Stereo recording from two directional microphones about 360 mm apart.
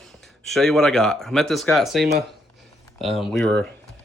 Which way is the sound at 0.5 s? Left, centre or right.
Centre.